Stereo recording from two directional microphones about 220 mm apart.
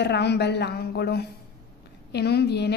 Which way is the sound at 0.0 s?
50° left (ahead or behind).